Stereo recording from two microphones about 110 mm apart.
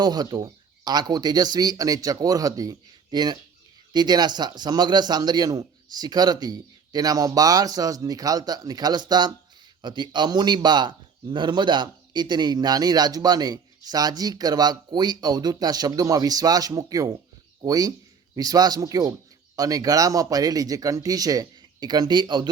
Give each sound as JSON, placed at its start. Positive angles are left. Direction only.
{"t": 0.0, "sound": "speech", "side_deg": -35}